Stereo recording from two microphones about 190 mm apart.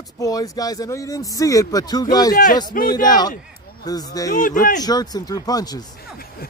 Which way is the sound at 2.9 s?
20° left (ahead or behind).